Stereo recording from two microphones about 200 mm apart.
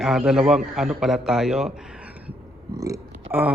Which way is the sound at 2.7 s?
15° right (ahead or behind).